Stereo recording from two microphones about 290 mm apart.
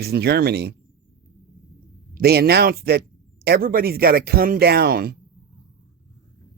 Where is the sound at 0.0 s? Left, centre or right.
Right.